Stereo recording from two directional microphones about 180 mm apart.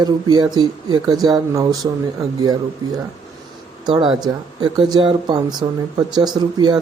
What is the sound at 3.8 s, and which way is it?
Speech, 25° right (ahead or behind).